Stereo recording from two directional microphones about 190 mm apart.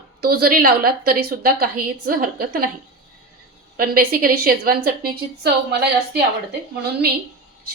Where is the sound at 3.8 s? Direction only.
50° right (ahead or behind).